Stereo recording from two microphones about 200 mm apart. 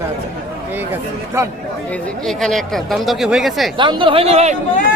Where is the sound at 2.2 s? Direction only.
Centre (ahead or behind).